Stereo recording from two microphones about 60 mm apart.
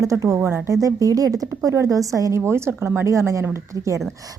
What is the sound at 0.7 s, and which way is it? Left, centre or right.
Speech, right.